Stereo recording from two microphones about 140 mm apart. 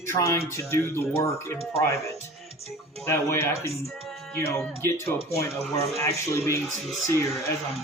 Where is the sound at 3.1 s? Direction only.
20° left (ahead or behind).